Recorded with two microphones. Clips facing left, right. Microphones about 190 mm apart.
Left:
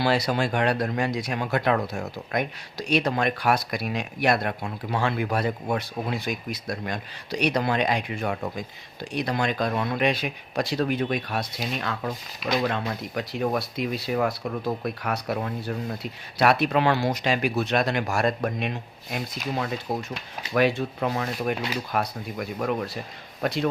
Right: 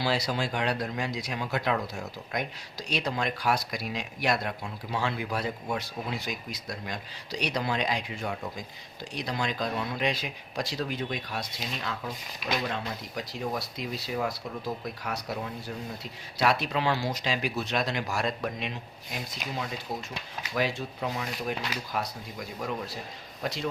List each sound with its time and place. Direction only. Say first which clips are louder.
0.0 s speech: left 5 dB; 60° left (ahead or behind)